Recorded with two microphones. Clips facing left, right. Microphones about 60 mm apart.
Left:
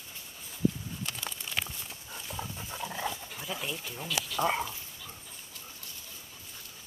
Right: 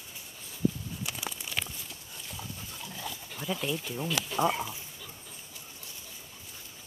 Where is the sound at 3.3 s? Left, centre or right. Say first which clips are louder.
Right 4 dB; centre.